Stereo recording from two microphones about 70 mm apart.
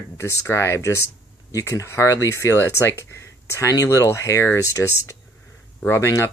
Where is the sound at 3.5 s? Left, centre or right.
Left.